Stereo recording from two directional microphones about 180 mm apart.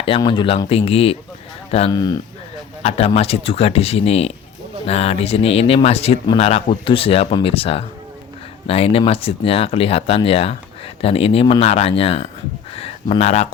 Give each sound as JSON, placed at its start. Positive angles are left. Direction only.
{"t": 0.2, "sound": "speech", "side_deg": 25}
{"t": 1.9, "sound": "speech", "side_deg": 20}
{"t": 3.2, "sound": "speech", "side_deg": 35}